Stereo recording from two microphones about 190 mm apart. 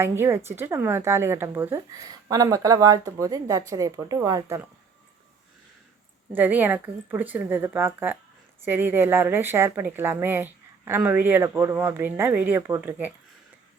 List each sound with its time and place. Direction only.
0.0 s speech: 15° right (ahead or behind)
6.3 s speech: 10° right (ahead or behind)